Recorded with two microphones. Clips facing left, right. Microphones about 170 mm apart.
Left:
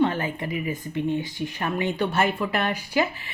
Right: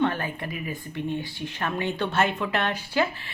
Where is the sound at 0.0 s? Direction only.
15° left (ahead or behind).